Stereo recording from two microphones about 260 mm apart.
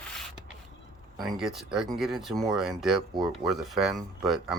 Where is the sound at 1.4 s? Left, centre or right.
Centre.